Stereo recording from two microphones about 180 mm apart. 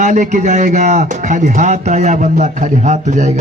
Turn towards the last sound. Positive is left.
turn(degrees=-40)  # may be behind; listen again after turning